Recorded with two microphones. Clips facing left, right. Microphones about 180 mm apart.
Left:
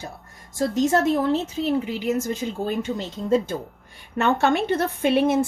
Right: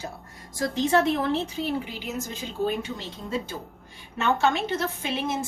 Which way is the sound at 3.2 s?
50° left (ahead or behind).